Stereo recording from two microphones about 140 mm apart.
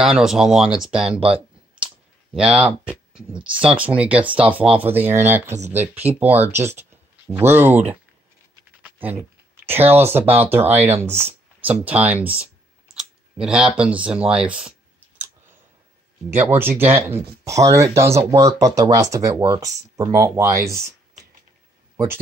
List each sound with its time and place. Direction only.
0.0 s speech: 5° right (ahead or behind)
2.3 s speech: 5° right (ahead or behind)
8.8 s a sound: 15° right (ahead or behind)
9.8 s speech: 15° right (ahead or behind)
16.3 s speech: 15° right (ahead or behind)